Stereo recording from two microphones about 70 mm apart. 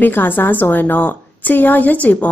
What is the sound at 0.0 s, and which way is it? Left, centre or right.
A woman's voice, left.